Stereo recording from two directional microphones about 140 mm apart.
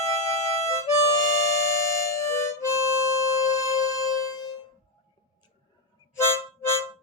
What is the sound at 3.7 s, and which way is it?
Music, 25° left (ahead or behind).